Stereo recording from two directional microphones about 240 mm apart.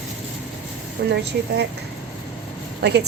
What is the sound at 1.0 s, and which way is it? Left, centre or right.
Speech, right.